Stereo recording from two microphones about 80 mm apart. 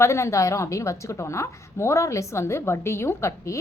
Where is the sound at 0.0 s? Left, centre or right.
Left.